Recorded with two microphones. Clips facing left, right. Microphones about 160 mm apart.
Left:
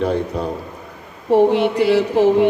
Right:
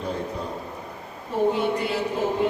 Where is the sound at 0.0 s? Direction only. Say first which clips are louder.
Left 9 dB; 80° left.